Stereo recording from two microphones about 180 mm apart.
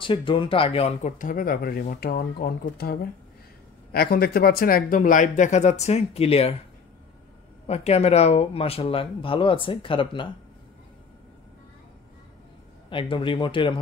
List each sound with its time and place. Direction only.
0.0 s speech: 30° left (ahead or behind)
7.6 s speech: 35° left (ahead or behind)
12.9 s speech: 30° left (ahead or behind)